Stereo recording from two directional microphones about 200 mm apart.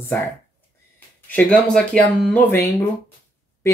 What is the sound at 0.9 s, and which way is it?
Speech, 5° left (ahead or behind).